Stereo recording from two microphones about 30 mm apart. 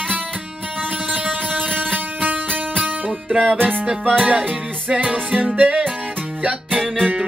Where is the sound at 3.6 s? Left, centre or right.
Right.